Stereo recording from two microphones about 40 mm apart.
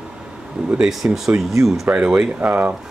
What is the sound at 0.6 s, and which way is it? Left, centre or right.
Speech, centre.